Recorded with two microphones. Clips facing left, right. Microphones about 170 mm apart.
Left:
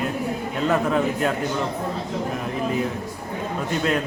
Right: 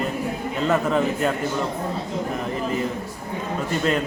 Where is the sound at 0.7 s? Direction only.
Centre (ahead or behind).